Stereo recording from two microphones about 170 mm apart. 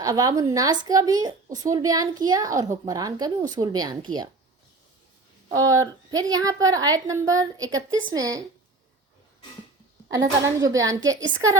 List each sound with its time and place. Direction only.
0.0 s a woman's voice: 20° right (ahead or behind)
5.5 s a woman's voice: 20° right (ahead or behind)
10.2 s a woman's voice: 20° right (ahead or behind)